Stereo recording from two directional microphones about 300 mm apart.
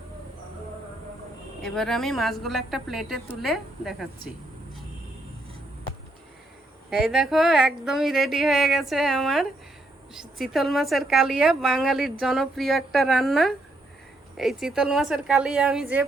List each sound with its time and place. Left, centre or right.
1.6 s a woman's voice: centre
6.9 s a woman's voice: centre